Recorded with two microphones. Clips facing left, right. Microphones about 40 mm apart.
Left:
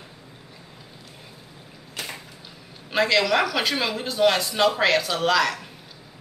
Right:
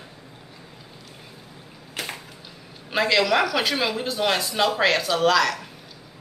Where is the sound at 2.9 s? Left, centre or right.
Centre.